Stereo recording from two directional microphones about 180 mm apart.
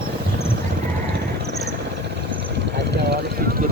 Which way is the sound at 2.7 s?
65° right (ahead or behind).